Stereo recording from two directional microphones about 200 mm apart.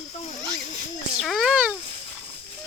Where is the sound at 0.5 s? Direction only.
40° left (ahead or behind).